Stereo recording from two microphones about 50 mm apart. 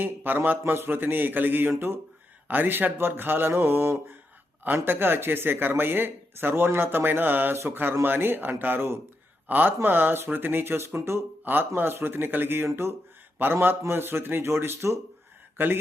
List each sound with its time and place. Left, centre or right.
0.0 s speech: right
4.6 s speech: right
7.5 s speech: right
8.0 s speech: right
10.8 s speech: right
11.5 s speech: right
12.8 s speech: right
13.4 s speech: right
15.5 s speech: right